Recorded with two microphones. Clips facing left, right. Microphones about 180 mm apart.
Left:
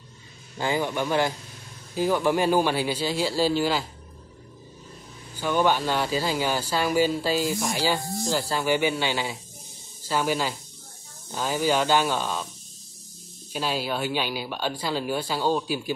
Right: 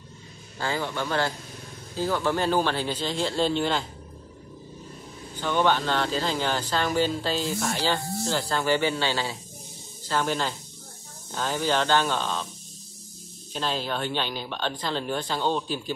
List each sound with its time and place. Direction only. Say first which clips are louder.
0.6 s speech: left 3 dB; 15° left (ahead or behind)
5.3 s speech: left 1 dB; 10° left (ahead or behind)
13.5 s speech: left 1 dB; 10° left (ahead or behind)